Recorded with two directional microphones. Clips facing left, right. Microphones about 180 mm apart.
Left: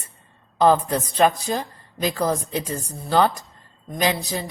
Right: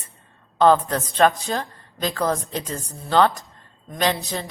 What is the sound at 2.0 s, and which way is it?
Speech, 15° left (ahead or behind).